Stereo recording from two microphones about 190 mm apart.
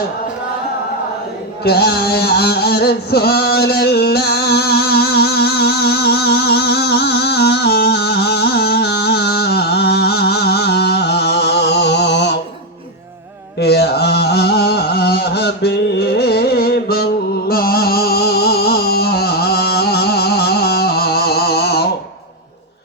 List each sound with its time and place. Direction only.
1.6 s music: 55° left (ahead or behind)
13.6 s a sound: 60° left (ahead or behind)
16.1 s carnatic music: 55° left (ahead or behind)
17.5 s music: 50° left (ahead or behind)